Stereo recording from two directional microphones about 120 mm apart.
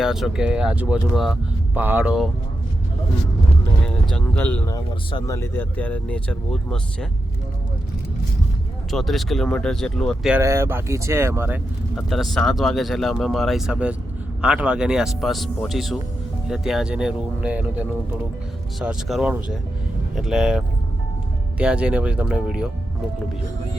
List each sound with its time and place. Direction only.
0.0 s speech: 5° right (ahead or behind)
1.7 s speech: 15° right (ahead or behind)
4.1 s speech: 10° left (ahead or behind)
4.7 s speech: 30° left (ahead or behind); by 7.1 s 5° left (ahead or behind)
8.9 s speech: centre (ahead or behind)
10.4 s speech: 25° right (ahead or behind)
12.0 s speech: centre (ahead or behind)